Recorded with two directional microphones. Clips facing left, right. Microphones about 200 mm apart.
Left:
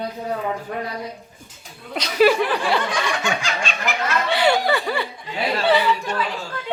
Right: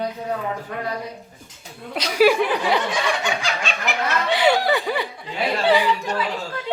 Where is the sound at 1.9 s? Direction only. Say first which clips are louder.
Even; 10° right (ahead or behind).